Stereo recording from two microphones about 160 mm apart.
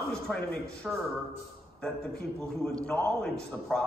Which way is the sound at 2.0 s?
80° left.